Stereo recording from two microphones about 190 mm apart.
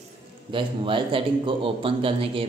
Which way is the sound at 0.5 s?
25° right (ahead or behind).